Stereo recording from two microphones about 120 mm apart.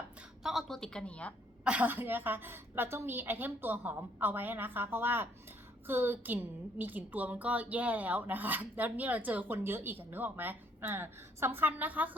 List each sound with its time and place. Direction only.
0.4 s a woman's voice: centre (ahead or behind)
1.6 s a woman's voice: 10° right (ahead or behind)